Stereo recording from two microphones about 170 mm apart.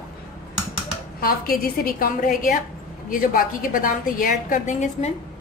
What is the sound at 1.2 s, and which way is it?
A woman's voice, 60° left (ahead or behind).